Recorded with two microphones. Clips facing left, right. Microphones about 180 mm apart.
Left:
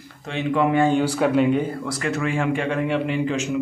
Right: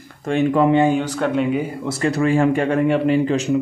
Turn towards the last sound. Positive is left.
turn(degrees=-40)  # may be behind; listen again after turning